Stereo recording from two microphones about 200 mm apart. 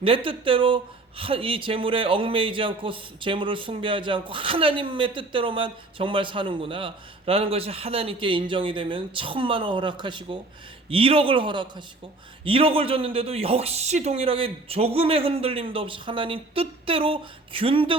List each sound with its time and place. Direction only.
0.0 s speech: 25° right (ahead or behind)